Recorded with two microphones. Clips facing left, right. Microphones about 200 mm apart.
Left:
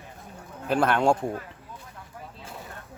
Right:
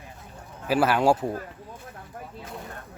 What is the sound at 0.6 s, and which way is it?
Speech, 5° right (ahead or behind).